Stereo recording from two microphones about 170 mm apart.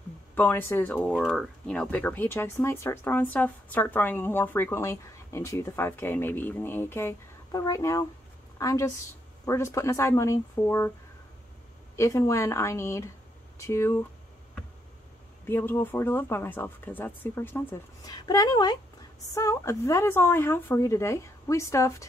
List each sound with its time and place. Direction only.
0.3 s a woman's voice: 10° left (ahead or behind)
12.0 s speech: 15° left (ahead or behind)
15.4 s speech: 15° left (ahead or behind)
18.0 s a woman's voice: 25° left (ahead or behind)